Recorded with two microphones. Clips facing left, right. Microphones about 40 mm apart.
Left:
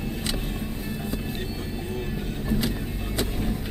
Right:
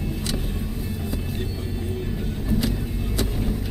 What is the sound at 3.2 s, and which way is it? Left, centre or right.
Vehicle, centre.